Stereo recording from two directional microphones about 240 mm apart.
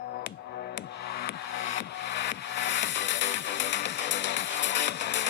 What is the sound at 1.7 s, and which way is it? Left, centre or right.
Music, left.